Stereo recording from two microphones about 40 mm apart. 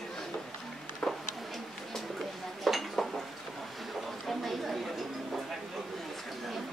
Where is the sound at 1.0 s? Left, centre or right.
Left.